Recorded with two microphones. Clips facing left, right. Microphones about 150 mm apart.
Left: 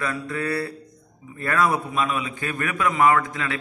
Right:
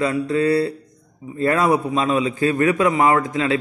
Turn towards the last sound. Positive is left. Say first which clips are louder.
# right 4 dB
turn(degrees=-25)  # may be behind; listen again after turning